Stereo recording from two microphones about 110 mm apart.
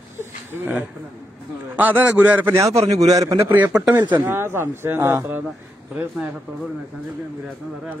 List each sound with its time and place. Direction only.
0.5 s a man's voice: 20° right (ahead or behind)
2.8 s a man's voice: 80° right
3.1 s a man's voice: 30° right (ahead or behind)
3.5 s a man's voice: 15° right (ahead or behind)